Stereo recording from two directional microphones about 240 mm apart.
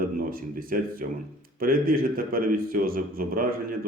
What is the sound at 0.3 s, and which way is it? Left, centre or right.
A man's voice, right.